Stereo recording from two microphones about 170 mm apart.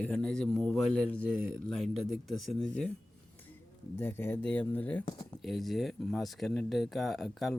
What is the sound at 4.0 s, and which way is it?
Speech, 15° left (ahead or behind).